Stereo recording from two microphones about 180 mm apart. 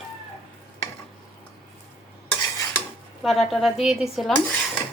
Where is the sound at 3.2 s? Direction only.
Centre (ahead or behind).